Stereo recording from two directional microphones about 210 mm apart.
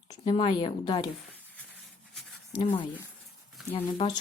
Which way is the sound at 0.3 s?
25° left (ahead or behind).